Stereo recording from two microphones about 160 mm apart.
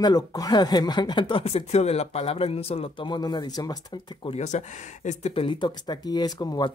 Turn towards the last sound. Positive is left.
turn(degrees=25)  # may be behind; listen again after turning